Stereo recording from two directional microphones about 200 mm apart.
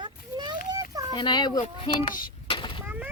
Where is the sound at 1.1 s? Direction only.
20° left (ahead or behind).